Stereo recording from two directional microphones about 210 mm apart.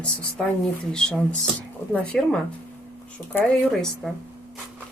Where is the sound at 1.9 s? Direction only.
Centre (ahead or behind).